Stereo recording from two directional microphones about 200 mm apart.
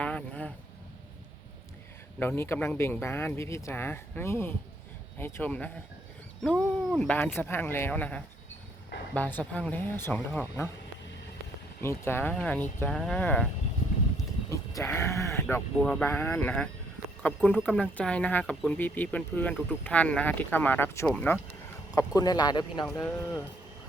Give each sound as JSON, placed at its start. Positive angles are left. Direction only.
{"t": 0.0, "sound": "vehicle", "side_deg": 5}
{"t": 2.1, "sound": "speech", "side_deg": 10}
{"t": 11.8, "sound": "speech", "side_deg": 10}
{"t": 14.5, "sound": "speech", "side_deg": 15}
{"t": 22.9, "sound": "speech", "side_deg": 5}